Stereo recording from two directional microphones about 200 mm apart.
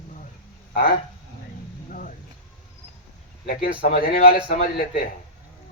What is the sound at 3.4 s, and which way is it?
A man's voice, 45° left (ahead or behind).